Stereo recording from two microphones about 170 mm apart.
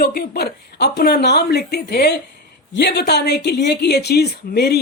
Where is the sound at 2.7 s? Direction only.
85° left.